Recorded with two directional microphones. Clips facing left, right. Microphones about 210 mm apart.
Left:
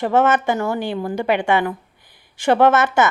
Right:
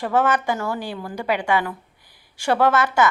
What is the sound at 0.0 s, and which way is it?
A woman's voice, 25° left (ahead or behind).